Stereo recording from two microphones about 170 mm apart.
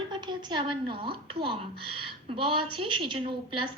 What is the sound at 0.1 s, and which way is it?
A woman's voice, 25° right (ahead or behind).